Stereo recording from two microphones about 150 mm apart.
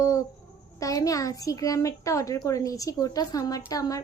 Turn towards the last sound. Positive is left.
turn(degrees=25)  # may be behind; listen again after turning